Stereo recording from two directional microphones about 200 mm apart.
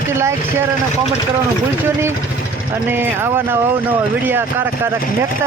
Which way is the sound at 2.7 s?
10° right (ahead or behind).